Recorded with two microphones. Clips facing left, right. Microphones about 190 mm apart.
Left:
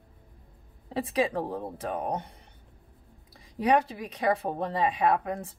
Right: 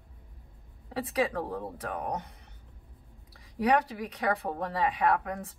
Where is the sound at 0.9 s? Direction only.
25° left (ahead or behind).